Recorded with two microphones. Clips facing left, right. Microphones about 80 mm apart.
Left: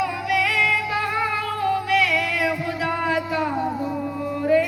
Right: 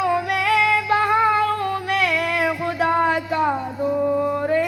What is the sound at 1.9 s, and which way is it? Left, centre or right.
Music, right.